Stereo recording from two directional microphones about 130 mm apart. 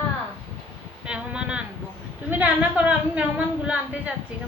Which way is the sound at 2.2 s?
15° right (ahead or behind).